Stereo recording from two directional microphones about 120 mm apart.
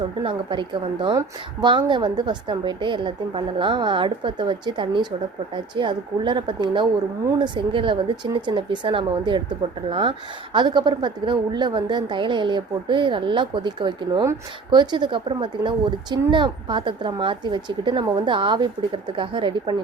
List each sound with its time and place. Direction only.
0.2 s speech: 40° right (ahead or behind)